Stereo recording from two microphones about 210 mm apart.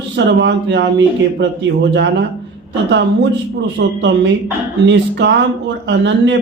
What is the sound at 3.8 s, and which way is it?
A woman's voice, 55° right (ahead or behind).